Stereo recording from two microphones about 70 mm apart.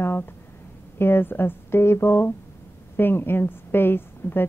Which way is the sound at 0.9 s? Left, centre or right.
Left.